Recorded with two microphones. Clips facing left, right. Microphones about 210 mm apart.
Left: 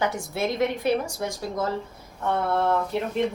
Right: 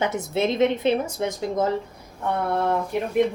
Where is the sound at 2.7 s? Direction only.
15° right (ahead or behind).